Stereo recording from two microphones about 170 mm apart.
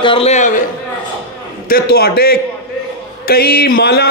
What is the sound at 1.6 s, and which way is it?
A man's voice, 65° left (ahead or behind).